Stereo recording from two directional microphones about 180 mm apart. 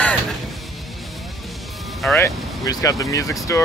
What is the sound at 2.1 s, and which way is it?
Vehicle, 15° left (ahead or behind).